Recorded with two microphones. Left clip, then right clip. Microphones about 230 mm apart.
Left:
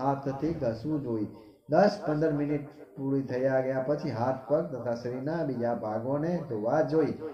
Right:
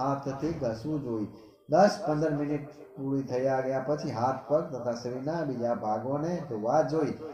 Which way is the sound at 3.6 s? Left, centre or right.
Left.